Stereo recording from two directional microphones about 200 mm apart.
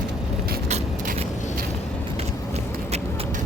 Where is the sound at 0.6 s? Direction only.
35° right (ahead or behind).